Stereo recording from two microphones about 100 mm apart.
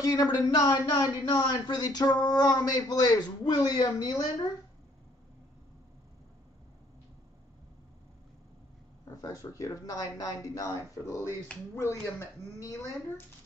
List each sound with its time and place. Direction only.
0.0 s speech: 40° left (ahead or behind)
9.0 s speech: 35° left (ahead or behind)